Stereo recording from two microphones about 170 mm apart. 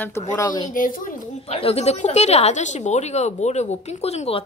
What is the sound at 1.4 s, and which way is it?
A woman's voice, 35° left (ahead or behind).